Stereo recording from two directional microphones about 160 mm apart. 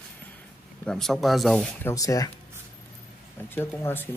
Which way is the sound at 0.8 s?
5° left (ahead or behind).